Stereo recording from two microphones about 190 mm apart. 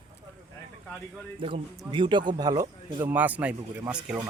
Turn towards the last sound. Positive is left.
turn(degrees=-5)  # may be behind; listen again after turning